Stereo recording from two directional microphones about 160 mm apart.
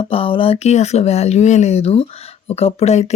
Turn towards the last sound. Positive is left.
turn(degrees=40)  # may be behind; listen again after turning